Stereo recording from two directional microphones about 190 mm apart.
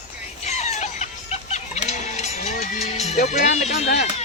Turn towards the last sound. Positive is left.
turn(degrees=35)  # may be behind; listen again after turning